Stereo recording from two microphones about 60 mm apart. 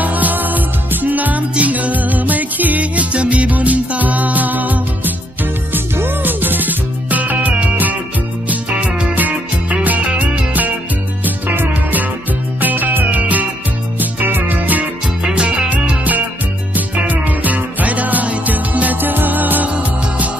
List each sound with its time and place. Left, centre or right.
0.0 s music: right
15.2 s music: centre